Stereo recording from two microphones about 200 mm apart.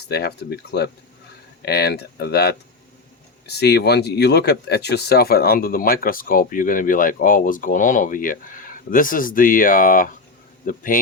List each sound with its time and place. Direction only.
0.1 s speech: 55° left (ahead or behind)